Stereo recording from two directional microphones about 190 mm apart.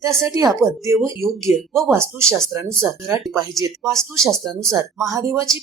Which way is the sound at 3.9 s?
Centre (ahead or behind).